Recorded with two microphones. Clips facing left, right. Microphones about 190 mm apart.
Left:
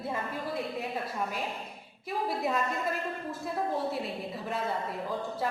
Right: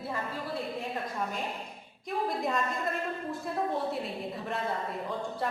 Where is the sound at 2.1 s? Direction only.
5° left (ahead or behind).